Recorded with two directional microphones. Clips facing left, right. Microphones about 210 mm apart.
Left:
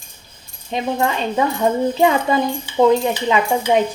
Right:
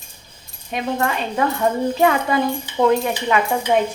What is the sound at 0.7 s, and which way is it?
Speech, 25° left (ahead or behind).